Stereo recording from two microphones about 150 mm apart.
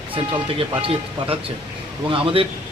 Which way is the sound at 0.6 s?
35° right (ahead or behind).